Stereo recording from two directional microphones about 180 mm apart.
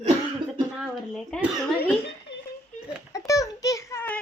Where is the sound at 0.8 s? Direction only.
Centre (ahead or behind).